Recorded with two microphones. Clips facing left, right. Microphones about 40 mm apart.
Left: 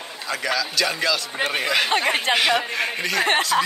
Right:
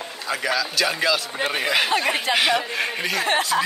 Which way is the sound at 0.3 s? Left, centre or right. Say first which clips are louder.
Right 1 dB; centre.